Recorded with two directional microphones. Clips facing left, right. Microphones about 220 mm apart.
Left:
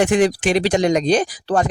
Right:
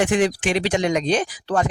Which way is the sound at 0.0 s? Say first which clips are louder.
Left 3 dB; 40° left (ahead or behind).